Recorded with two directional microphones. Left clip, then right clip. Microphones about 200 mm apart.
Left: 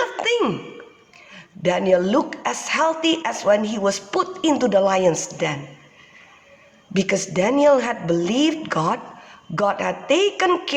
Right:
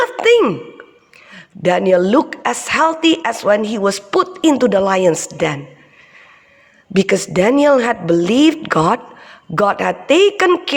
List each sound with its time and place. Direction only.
0.0 s sigh: 40° right (ahead or behind)
1.3 s a woman's voice: 35° right (ahead or behind)
6.9 s a woman's voice: 35° right (ahead or behind)